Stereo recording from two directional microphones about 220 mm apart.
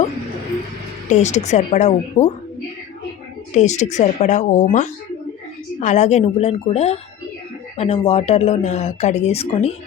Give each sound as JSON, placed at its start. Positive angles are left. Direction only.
{"t": 1.1, "sound": "speech", "side_deg": 30}
{"t": 3.5, "sound": "speech", "side_deg": 30}